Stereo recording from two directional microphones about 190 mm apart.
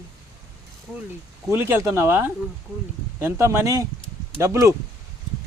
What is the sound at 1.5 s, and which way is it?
Speech, 10° right (ahead or behind).